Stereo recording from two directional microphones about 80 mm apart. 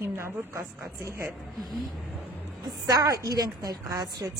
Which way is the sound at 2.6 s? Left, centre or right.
Right.